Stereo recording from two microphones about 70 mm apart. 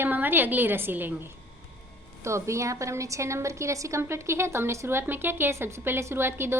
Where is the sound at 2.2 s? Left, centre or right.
Right.